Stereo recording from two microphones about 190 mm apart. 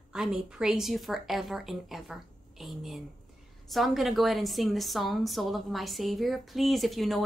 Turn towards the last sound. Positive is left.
turn(degrees=0)  # may be behind; listen again after turning